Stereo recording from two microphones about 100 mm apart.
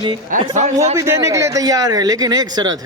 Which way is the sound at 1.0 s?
30° right (ahead or behind).